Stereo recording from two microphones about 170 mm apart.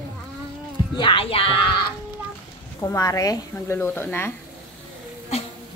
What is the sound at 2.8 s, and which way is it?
A woman's voice, 15° left (ahead or behind).